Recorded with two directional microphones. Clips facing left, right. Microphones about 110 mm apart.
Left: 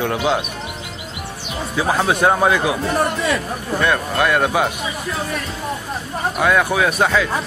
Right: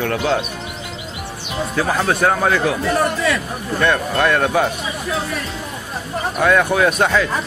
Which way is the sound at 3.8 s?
10° left (ahead or behind).